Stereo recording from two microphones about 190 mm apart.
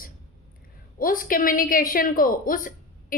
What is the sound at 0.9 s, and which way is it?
A woman's voice, 50° left (ahead or behind).